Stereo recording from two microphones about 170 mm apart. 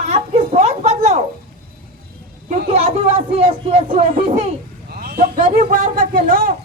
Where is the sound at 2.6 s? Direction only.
35° right (ahead or behind).